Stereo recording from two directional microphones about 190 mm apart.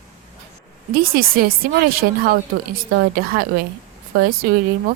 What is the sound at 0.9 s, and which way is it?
A woman's voice, 50° right (ahead or behind).